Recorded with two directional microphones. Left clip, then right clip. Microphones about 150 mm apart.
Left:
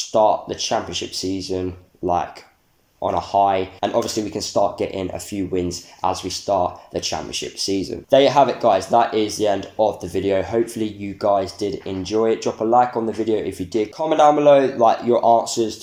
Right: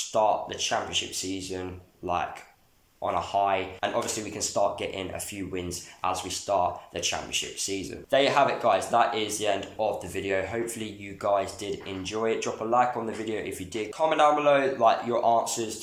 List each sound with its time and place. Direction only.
0.1 s speech: 35° left (ahead or behind)
3.0 s speech: 35° left (ahead or behind)